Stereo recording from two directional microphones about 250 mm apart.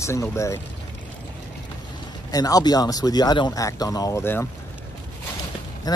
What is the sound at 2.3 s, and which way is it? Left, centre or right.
Speech, centre.